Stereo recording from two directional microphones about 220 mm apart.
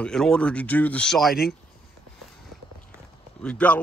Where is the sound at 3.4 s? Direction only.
5° left (ahead or behind).